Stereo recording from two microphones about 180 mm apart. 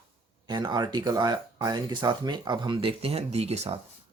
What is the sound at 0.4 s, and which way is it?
Speech, 25° right (ahead or behind).